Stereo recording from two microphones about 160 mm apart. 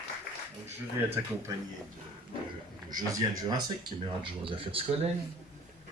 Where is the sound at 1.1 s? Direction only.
15° right (ahead or behind).